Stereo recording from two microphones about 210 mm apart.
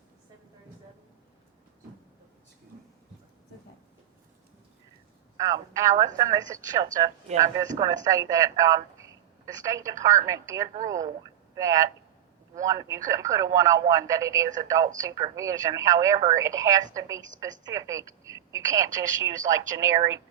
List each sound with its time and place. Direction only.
5.4 s speech: 15° right (ahead or behind)